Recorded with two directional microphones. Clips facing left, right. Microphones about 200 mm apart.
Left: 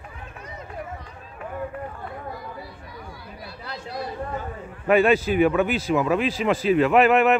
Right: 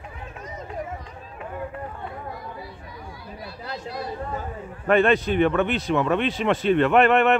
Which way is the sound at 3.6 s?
40° right (ahead or behind).